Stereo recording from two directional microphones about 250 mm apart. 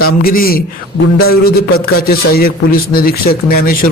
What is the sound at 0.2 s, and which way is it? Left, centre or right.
Speech, left.